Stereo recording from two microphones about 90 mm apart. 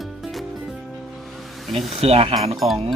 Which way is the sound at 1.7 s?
90° right.